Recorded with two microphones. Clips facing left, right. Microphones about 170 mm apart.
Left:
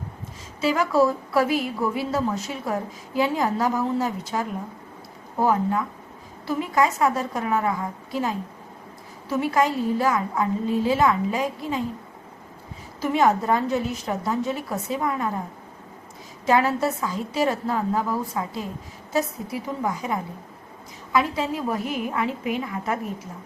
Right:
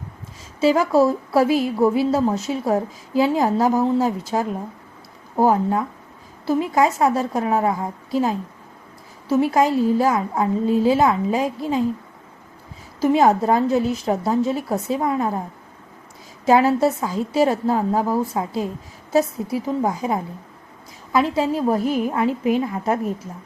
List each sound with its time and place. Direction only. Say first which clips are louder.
0.6 s a woman's voice: right 4 dB; 30° right (ahead or behind)
5.4 s a woman's voice: right 4 dB; 35° right (ahead or behind)
9.4 s a woman's voice: right 4 dB; 35° right (ahead or behind)
13.0 s a woman's voice: right 5 dB; 30° right (ahead or behind)
16.5 s a woman's voice: right 5 dB; 35° right (ahead or behind)